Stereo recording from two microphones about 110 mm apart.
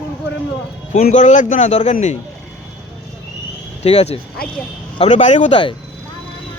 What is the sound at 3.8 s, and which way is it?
Speech, 75° left (ahead or behind).